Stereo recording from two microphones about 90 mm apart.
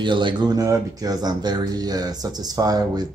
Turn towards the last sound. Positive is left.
turn(degrees=-45)  # may be behind; listen again after turning